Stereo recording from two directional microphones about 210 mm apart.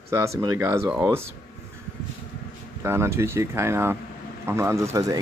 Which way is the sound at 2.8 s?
10° right (ahead or behind).